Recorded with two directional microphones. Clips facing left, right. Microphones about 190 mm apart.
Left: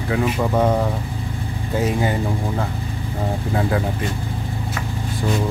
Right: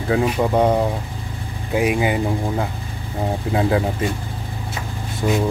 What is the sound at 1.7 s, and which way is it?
Speech, 15° right (ahead or behind).